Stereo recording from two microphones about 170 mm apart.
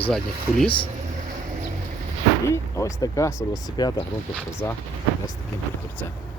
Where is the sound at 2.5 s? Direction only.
20° left (ahead or behind).